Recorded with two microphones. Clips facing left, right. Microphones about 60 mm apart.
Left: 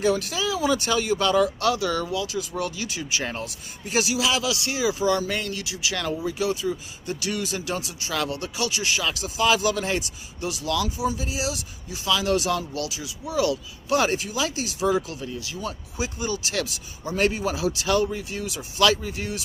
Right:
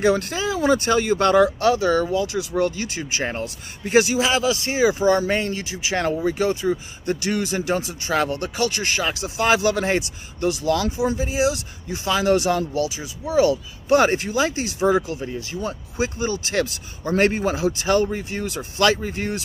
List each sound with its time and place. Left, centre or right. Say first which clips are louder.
0.0 s speech: right 3 dB; right
1.6 s speech: right 5 dB; right
3.8 s speech: right 6 dB; right
6.2 s speech: right 5 dB; right
11.1 s speech: right 8 dB; right
12.7 s speech: right 6 dB; right
18.9 s speech: right 4 dB; right